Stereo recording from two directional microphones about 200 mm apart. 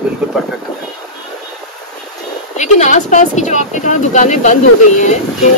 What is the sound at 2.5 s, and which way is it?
Speech, 35° left (ahead or behind).